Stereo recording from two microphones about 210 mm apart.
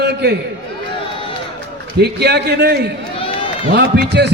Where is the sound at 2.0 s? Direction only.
50° right (ahead or behind).